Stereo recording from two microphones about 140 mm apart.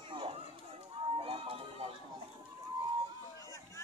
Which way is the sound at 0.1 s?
40° right (ahead or behind).